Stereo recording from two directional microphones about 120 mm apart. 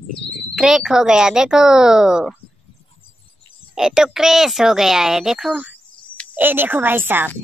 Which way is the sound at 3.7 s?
5° right (ahead or behind).